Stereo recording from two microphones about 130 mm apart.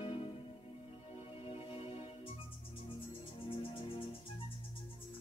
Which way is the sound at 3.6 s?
45° left (ahead or behind).